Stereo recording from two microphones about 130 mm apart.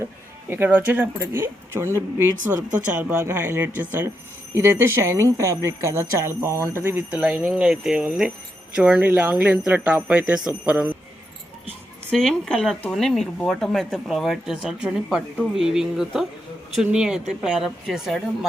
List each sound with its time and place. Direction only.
0.5 s a woman's voice: 15° right (ahead or behind)
12.1 s speech: 5° left (ahead or behind)